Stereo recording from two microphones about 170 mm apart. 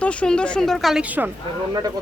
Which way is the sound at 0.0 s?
5° left (ahead or behind).